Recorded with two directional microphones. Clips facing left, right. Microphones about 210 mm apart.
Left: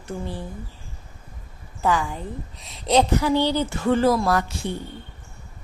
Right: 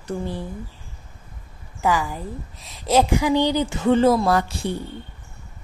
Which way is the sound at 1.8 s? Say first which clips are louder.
Right 1 dB; 5° right (ahead or behind).